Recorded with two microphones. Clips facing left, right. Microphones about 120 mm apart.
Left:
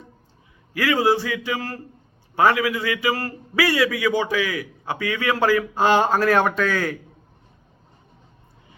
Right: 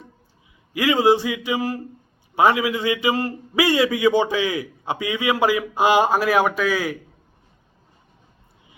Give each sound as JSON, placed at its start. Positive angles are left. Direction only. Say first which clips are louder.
{"t": 0.7, "sound": "a man's voice", "louder": "right 2 dB", "side_deg": -20}